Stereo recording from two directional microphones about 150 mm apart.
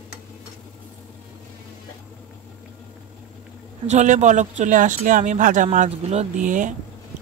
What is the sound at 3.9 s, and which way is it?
Speech, 50° right (ahead or behind).